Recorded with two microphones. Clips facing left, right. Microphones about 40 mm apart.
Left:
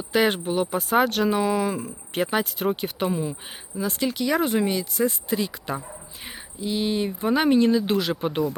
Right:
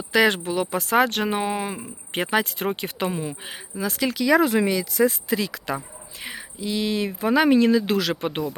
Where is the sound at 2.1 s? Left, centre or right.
Right.